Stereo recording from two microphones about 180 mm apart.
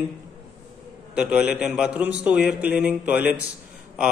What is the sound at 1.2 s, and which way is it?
A man's voice, 5° right (ahead or behind).